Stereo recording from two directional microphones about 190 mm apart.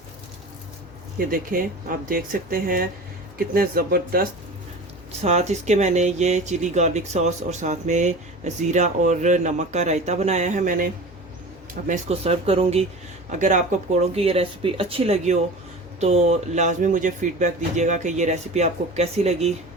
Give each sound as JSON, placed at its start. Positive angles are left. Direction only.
{"t": 1.3, "sound": "speech", "side_deg": -50}
{"t": 5.2, "sound": "speech", "side_deg": -35}
{"t": 13.4, "sound": "speech", "side_deg": -40}